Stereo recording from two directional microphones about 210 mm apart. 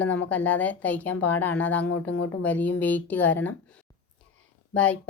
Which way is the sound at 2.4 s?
10° left (ahead or behind).